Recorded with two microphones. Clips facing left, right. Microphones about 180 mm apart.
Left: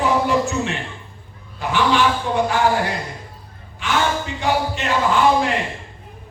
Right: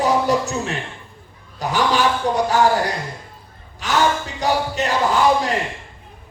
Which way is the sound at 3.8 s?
40° right (ahead or behind).